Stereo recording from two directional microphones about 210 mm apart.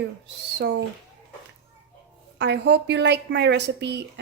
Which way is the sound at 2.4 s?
55° right (ahead or behind).